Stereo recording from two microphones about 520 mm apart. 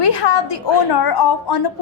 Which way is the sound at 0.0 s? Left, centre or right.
Left.